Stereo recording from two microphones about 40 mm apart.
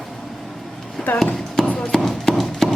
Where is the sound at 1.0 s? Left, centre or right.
Centre.